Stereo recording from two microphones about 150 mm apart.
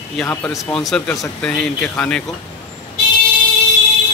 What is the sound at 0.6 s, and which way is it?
Speech, centre (ahead or behind).